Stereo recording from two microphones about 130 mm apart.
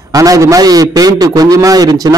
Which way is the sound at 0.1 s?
25° right (ahead or behind).